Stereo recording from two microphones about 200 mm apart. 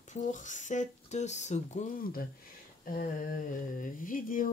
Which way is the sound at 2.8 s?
45° left (ahead or behind).